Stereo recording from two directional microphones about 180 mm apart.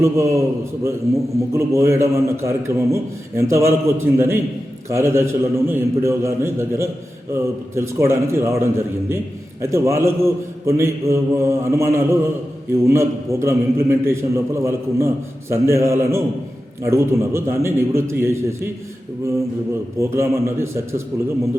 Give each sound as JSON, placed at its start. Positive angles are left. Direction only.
{"t": 0.0, "sound": "a man's voice", "side_deg": -15}
{"t": 1.5, "sound": "a man's voice", "side_deg": -15}
{"t": 20.0, "sound": "a man's voice", "side_deg": -15}